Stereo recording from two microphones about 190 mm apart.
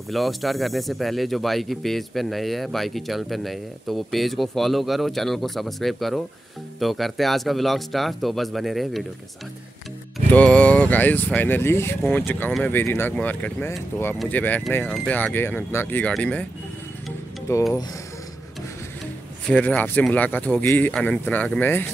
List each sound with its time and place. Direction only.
0.1 s speech: centre (ahead or behind)
10.1 s speech: 5° left (ahead or behind)
14.1 s speech: centre (ahead or behind)
17.5 s speech: 15° left (ahead or behind)
19.4 s speech: 10° left (ahead or behind)